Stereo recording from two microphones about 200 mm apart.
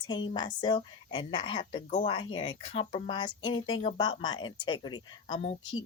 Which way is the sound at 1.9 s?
35° left (ahead or behind).